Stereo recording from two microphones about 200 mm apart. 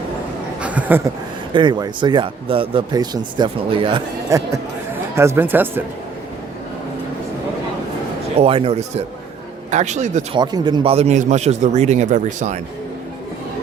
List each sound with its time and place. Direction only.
0.6 s a sound: 5° right (ahead or behind)
1.5 s speech: 20° right (ahead or behind)
8.4 s speech: 30° right (ahead or behind)
10.3 s speech: 20° right (ahead or behind); by 12.5 s 40° right (ahead or behind)